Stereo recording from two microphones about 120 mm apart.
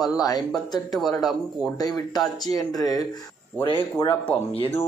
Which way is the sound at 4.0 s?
20° left (ahead or behind).